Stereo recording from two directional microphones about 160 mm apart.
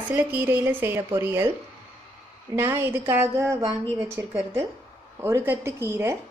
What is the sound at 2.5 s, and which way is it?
A woman's voice, 15° right (ahead or behind).